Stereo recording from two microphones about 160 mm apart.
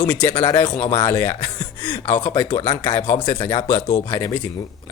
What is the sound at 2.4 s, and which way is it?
Speech, 30° left (ahead or behind).